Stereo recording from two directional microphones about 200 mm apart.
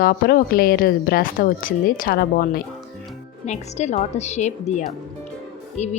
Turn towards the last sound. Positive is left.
turn(degrees=35)  # may be behind; listen again after turning